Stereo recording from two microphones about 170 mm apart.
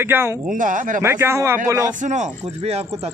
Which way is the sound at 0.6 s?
50° right (ahead or behind).